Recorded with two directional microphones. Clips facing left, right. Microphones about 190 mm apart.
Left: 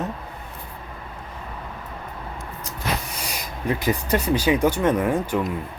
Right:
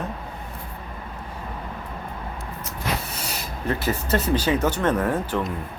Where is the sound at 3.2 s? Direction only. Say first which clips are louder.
Even; 15° left (ahead or behind).